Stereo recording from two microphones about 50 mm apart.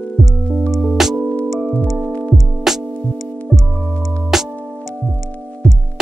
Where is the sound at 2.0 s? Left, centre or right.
Left.